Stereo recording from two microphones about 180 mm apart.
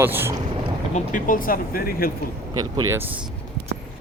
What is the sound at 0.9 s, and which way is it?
Speech, 50° left (ahead or behind).